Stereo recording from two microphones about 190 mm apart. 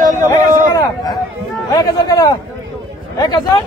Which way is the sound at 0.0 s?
40° right (ahead or behind).